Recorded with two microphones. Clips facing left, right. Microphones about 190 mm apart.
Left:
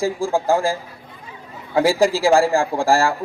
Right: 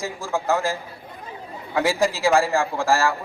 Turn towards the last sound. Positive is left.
turn(degrees=30)  # may be behind; listen again after turning